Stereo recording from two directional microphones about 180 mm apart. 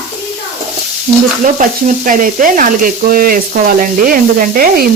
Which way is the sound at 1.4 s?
45° right (ahead or behind).